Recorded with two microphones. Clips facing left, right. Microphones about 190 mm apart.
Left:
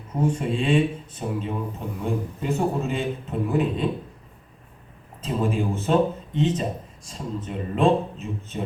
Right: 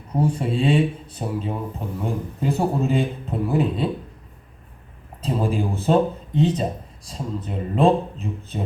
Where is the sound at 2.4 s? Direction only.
35° right (ahead or behind).